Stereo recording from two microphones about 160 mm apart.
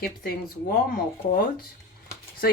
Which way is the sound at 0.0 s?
75° left (ahead or behind).